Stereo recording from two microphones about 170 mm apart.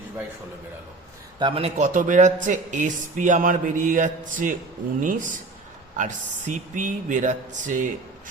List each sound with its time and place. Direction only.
1.4 s a man's voice: 30° right (ahead or behind)
1.9 s speech: 50° right (ahead or behind)
6.5 s speech: 50° right (ahead or behind)